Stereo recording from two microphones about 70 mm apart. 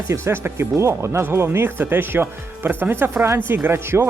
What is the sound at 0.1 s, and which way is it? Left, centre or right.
Speech, right.